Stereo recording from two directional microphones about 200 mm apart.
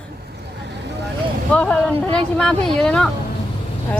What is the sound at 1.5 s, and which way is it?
Speech, 5° left (ahead or behind).